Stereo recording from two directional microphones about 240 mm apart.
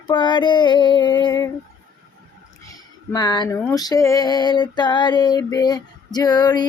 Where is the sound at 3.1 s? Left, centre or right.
Centre.